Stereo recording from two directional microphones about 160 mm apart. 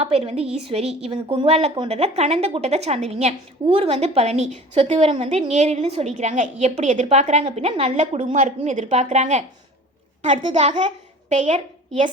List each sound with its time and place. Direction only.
0.0 s a woman's voice: 40° right (ahead or behind)